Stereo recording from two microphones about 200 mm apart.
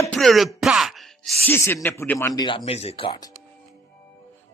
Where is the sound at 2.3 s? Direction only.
20° left (ahead or behind).